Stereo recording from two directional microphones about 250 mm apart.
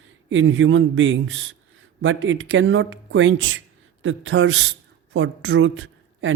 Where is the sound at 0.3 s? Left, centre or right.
Right.